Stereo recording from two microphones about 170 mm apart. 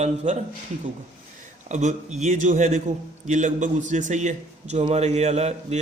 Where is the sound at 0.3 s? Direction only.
45° right (ahead or behind).